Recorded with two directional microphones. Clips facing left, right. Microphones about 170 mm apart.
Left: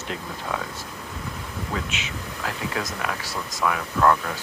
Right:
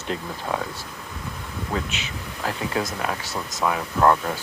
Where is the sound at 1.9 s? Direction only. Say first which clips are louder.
Even; 35° right (ahead or behind).